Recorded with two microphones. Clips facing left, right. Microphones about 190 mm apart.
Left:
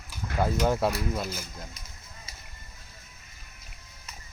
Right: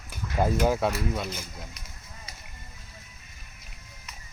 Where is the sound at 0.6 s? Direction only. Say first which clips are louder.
Right 1 dB; 5° right (ahead or behind).